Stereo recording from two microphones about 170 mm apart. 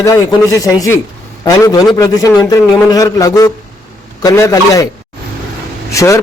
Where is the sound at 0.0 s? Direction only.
20° left (ahead or behind).